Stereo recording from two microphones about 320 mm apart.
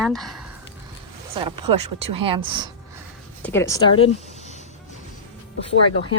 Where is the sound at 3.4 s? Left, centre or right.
Centre.